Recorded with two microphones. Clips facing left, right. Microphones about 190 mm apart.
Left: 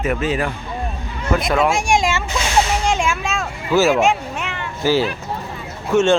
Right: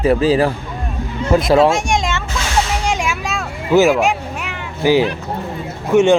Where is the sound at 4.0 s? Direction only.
5° right (ahead or behind).